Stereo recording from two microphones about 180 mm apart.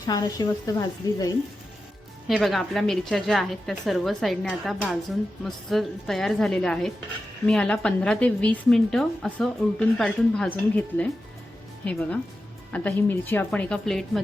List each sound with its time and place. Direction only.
0.0 s a woman's voice: 20° left (ahead or behind)
2.2 s a woman's voice: centre (ahead or behind)